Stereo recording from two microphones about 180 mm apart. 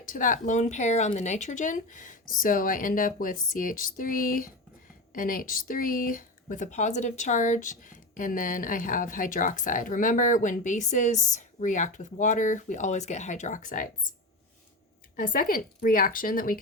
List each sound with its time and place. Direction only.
0.0 s speech: 45° left (ahead or behind)
15.1 s speech: 50° left (ahead or behind)